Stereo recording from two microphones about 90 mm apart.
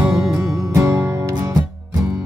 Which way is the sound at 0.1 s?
Centre (ahead or behind).